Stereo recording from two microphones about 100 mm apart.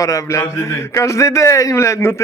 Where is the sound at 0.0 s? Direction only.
35° left (ahead or behind).